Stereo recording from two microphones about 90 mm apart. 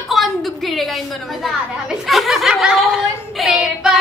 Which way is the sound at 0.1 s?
Centre (ahead or behind).